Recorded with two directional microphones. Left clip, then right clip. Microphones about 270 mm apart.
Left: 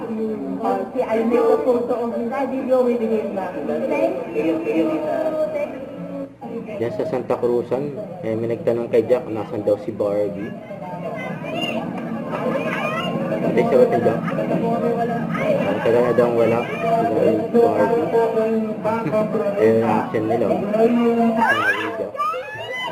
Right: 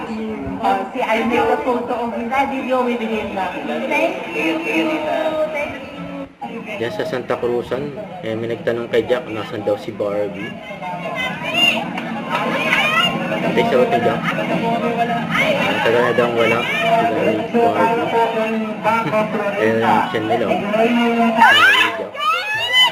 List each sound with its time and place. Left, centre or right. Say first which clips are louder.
0.6 s speech: right 4 dB; centre
6.8 s speech: right 1 dB; centre
8.6 s speech: even; centre
12.3 s speech: right 6 dB; centre